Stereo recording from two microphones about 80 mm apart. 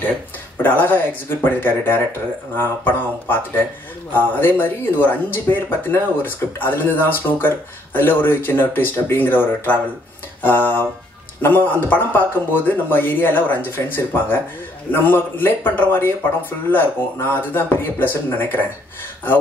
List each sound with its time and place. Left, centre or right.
0.6 s speech: left